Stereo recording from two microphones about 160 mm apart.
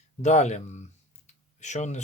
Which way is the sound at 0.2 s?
45° left (ahead or behind).